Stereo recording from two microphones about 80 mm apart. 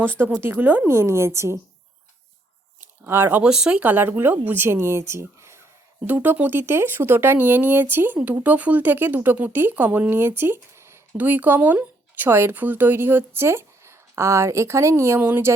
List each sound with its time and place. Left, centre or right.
0.0 s speech: right
0.9 s a woman's voice: right
2.8 s a sound: right
3.4 s speech: centre
3.8 s speech: right
6.1 s speech: right
11.2 s speech: right
15.2 s speech: right